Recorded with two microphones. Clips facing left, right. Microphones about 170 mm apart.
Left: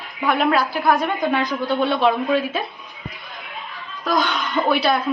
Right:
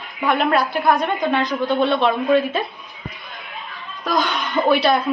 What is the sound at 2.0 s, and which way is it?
Speech, centre (ahead or behind).